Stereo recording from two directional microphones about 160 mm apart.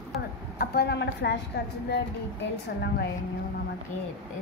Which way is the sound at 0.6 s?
80° left.